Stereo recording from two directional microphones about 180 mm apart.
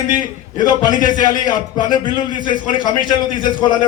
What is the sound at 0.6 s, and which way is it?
Speech, 50° left (ahead or behind).